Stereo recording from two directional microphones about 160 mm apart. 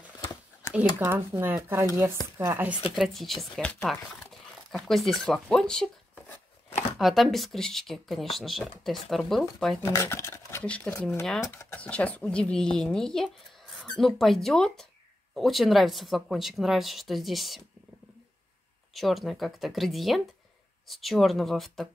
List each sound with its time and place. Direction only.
0.2 s a sound: 15° left (ahead or behind)
0.9 s speech: 15° right (ahead or behind)
9.8 s speech: 15° left (ahead or behind); by 17.6 s centre (ahead or behind)
18.9 s speech: centre (ahead or behind)